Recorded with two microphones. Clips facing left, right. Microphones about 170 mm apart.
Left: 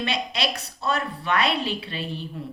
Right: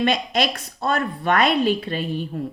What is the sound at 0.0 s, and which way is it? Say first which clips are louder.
A woman's voice: right 6 dB; 50° right (ahead or behind).